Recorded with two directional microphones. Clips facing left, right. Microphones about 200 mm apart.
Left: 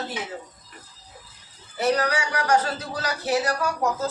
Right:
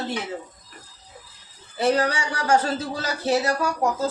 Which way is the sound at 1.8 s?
30° right (ahead or behind).